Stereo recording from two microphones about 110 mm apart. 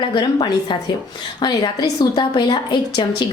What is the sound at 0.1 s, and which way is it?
A woman's voice, 45° left (ahead or behind).